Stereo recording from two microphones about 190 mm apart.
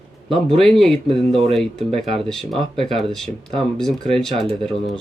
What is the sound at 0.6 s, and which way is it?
Speech, centre (ahead or behind).